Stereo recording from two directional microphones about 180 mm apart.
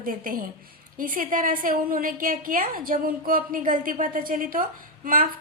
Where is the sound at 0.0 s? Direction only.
50° right (ahead or behind).